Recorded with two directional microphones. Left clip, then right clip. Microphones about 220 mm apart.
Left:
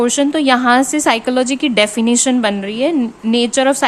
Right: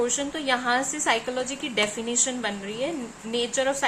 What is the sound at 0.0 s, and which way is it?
A woman's voice, 50° left (ahead or behind).